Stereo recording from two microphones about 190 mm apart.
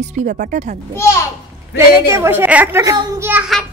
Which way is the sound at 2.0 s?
15° right (ahead or behind).